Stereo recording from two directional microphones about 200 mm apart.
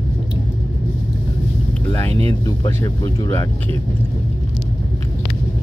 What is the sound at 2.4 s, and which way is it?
Speech, 15° left (ahead or behind).